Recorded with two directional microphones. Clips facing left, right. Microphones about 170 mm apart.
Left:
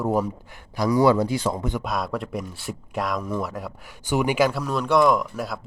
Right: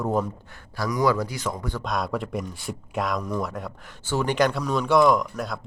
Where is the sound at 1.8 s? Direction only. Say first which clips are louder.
Even; centre (ahead or behind).